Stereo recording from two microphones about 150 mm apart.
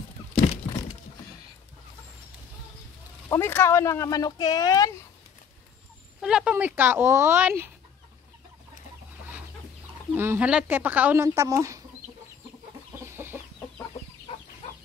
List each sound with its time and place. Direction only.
3.3 s speech: 15° left (ahead or behind)
6.2 s speech: 5° right (ahead or behind)
10.1 s speech: 15° right (ahead or behind)
11.2 s speech: 20° right (ahead or behind)
12.9 s chicken: 15° right (ahead or behind)